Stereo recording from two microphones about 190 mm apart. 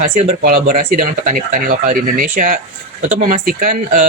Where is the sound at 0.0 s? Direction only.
35° right (ahead or behind).